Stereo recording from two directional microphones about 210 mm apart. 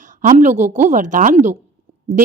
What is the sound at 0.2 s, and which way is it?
Speech, 35° right (ahead or behind).